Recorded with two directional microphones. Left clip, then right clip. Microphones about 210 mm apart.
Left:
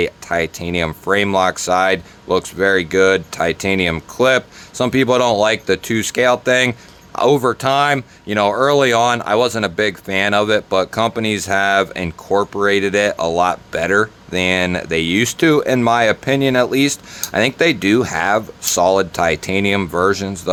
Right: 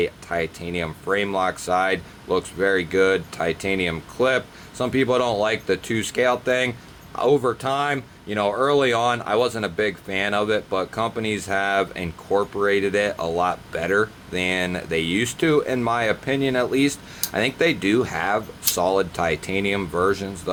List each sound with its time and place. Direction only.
0.0 s speech: 30° left (ahead or behind)